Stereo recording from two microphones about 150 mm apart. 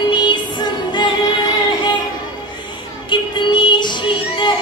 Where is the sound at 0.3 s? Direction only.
30° left (ahead or behind).